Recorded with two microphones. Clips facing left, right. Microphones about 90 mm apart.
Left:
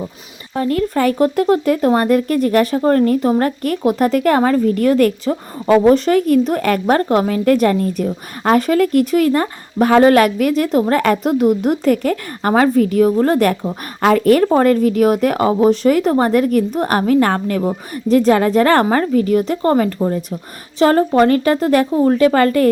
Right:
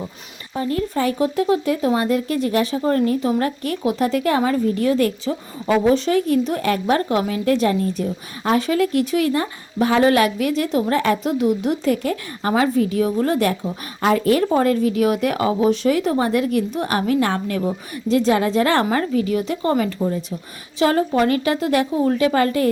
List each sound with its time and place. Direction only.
0.5 s speech: 65° left (ahead or behind); by 13.6 s 50° left (ahead or behind)
14.0 s speech: 60° left (ahead or behind)